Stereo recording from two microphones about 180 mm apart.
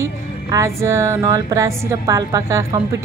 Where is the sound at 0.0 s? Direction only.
15° right (ahead or behind).